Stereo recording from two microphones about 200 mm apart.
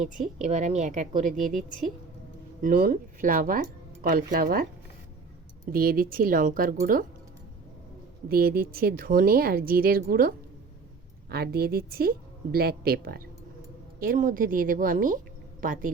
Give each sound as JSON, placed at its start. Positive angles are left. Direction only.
{"t": 0.4, "sound": "a woman's voice", "side_deg": -35}
{"t": 5.7, "sound": "speech", "side_deg": -45}
{"t": 8.3, "sound": "speech", "side_deg": -50}